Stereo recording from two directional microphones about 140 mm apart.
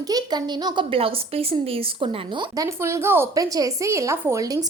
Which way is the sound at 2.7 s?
20° right (ahead or behind).